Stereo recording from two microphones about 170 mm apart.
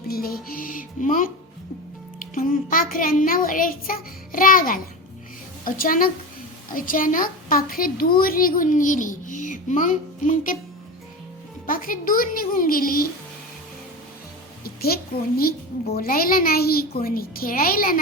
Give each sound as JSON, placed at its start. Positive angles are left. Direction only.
{"t": 0.1, "sound": "music", "side_deg": 60}
{"t": 2.3, "sound": "speech", "side_deg": 50}
{"t": 11.6, "sound": "speech", "side_deg": 55}
{"t": 14.6, "sound": "a sound", "side_deg": 65}
{"t": 15.9, "sound": "speech", "side_deg": 60}